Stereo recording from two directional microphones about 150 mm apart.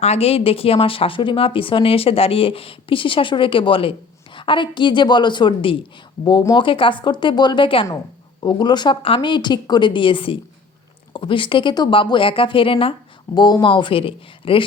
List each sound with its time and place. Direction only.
0.0 s speech: 45° left (ahead or behind)